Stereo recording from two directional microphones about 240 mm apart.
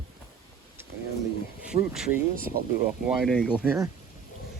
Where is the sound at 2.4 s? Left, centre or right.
Right.